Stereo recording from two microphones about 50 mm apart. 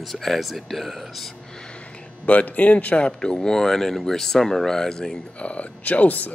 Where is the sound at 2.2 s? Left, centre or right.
Left.